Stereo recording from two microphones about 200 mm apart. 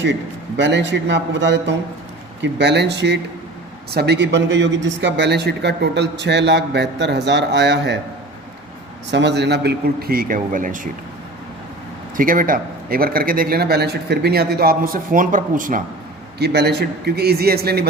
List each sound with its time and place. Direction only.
0.0 s a man's voice: 65° right (ahead or behind)
9.0 s a man's voice: 60° right (ahead or behind); by 10.8 s 40° right (ahead or behind)
12.1 s a man's voice: 45° right (ahead or behind)
16.4 s a man's voice: 55° right (ahead or behind)